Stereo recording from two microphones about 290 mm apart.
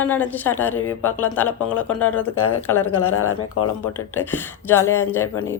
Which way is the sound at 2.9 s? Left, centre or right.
Left.